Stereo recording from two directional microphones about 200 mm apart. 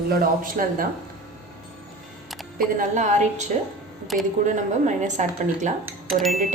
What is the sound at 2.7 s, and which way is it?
Speech, 40° right (ahead or behind).